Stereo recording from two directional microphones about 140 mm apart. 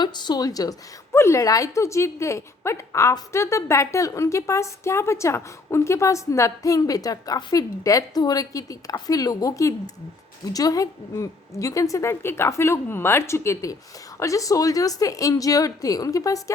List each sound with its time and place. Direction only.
0.0 s a woman's voice: 30° left (ahead or behind)